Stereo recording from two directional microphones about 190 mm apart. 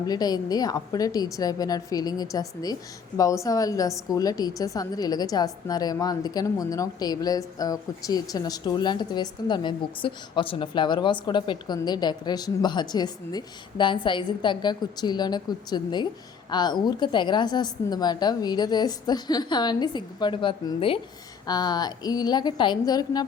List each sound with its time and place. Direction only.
0.0 s a woman's voice: 20° left (ahead or behind)